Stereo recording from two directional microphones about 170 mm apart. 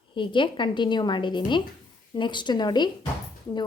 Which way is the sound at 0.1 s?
30° left (ahead or behind).